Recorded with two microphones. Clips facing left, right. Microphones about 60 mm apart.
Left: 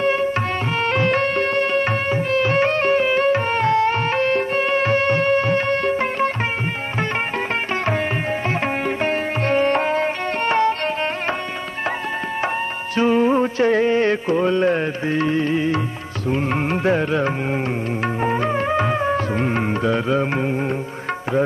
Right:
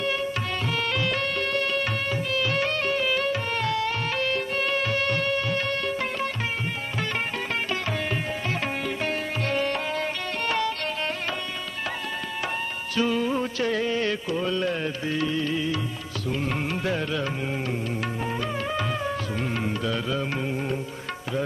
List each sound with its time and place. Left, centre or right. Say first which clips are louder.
0.0 s music: left 8 dB; left
8.5 s music: left 7 dB; left
12.9 s music: left 8 dB; left